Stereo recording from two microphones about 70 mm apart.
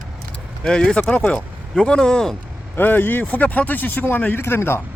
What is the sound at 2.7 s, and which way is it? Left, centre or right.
Speech, left.